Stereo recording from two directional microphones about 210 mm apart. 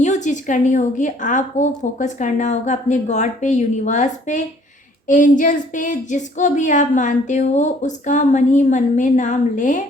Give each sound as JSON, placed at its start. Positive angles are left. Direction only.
{"t": 0.0, "sound": "a woman's voice", "side_deg": 35}